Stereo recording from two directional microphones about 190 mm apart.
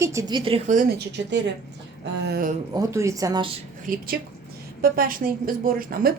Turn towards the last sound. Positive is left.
turn(degrees=-50)  # may be behind; listen again after turning